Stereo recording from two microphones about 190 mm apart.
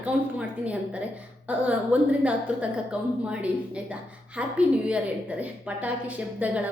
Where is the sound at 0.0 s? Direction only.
5° right (ahead or behind).